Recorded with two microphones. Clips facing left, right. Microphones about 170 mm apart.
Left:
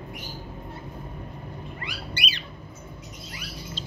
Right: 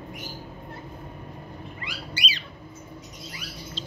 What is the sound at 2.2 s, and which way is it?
Squawk, 60° left (ahead or behind).